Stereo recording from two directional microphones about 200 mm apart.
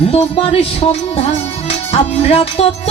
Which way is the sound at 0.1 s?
30° left (ahead or behind).